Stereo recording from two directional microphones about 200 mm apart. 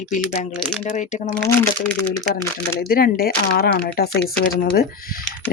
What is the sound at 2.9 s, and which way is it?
Speech, 45° left (ahead or behind).